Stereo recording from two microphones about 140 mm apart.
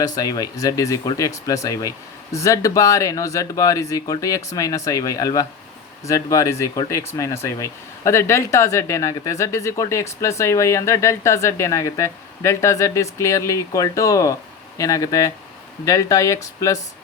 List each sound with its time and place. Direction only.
0.2 s speech: 25° left (ahead or behind)